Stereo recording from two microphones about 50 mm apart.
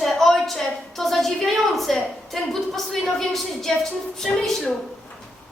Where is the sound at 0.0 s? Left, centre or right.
Centre.